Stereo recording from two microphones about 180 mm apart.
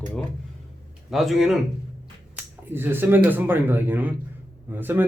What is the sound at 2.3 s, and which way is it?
Speech, 10° right (ahead or behind).